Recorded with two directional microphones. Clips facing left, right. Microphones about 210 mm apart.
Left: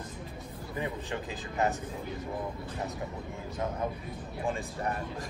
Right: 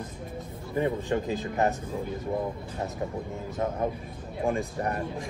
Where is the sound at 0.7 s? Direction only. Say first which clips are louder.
Right 9 dB; 45° right (ahead or behind).